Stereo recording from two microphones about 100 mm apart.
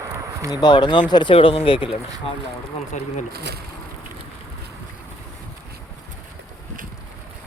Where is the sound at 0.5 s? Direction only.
45° left (ahead or behind).